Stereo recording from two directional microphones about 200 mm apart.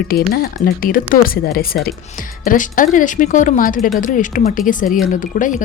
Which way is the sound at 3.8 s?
Centre (ahead or behind).